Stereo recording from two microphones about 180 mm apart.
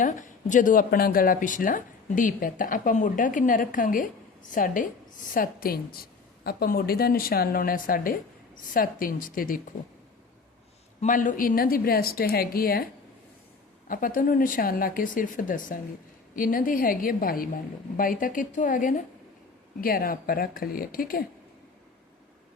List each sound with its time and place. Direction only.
0.0 s a woman's voice: 45° left (ahead or behind)
11.0 s a woman's voice: 45° left (ahead or behind)
13.8 s speech: 50° left (ahead or behind)